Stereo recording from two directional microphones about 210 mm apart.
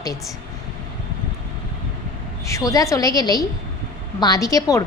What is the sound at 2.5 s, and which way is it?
A woman's voice, 15° left (ahead or behind).